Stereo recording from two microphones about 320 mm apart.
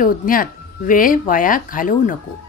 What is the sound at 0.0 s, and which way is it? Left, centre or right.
A woman's voice, left.